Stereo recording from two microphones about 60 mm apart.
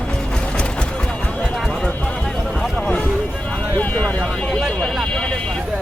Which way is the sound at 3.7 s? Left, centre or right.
Left.